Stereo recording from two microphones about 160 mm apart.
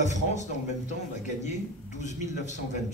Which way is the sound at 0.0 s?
50° left (ahead or behind).